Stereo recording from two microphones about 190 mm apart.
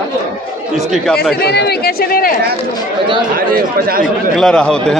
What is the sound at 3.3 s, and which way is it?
Speech, 50° right (ahead or behind).